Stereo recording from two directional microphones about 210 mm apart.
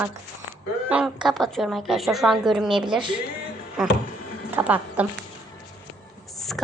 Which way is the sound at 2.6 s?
25° right (ahead or behind).